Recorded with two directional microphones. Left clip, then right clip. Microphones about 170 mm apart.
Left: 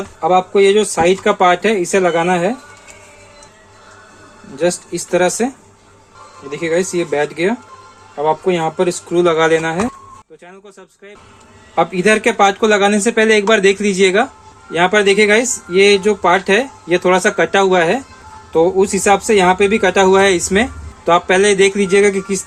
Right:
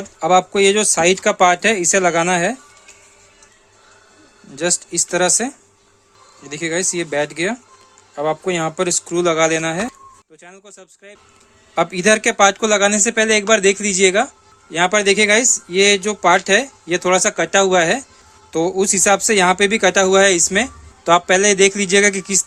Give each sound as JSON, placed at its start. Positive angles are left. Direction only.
{"t": 0.2, "sound": "speech", "side_deg": -60}
{"t": 4.5, "sound": "speech", "side_deg": -40}
{"t": 10.4, "sound": "speech", "side_deg": -25}
{"t": 11.7, "sound": "speech", "side_deg": -45}